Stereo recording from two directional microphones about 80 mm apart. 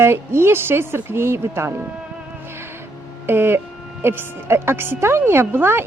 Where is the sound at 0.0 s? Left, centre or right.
Right.